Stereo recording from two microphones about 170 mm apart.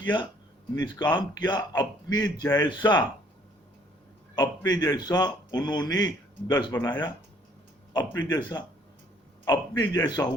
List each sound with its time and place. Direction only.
0.8 s speech: 25° left (ahead or behind)
4.4 s speech: 25° left (ahead or behind)